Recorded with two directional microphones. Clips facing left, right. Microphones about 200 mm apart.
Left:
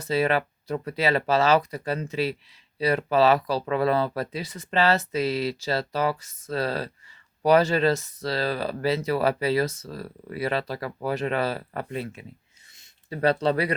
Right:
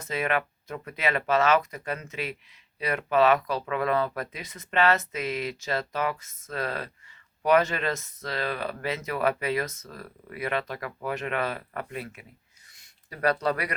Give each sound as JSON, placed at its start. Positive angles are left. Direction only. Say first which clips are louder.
{"t": 0.0, "sound": "speech", "louder": "left 5 dB", "side_deg": 35}